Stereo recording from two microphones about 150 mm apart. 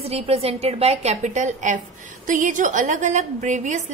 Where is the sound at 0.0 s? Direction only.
40° right (ahead or behind).